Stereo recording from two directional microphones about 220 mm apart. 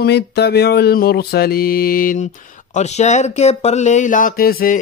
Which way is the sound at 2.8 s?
30° left (ahead or behind).